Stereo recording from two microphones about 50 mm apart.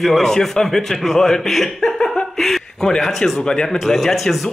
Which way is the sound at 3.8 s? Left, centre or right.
Centre.